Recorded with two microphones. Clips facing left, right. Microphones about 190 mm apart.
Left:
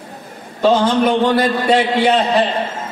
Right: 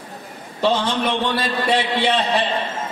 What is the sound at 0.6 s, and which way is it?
A man's voice, 45° left (ahead or behind).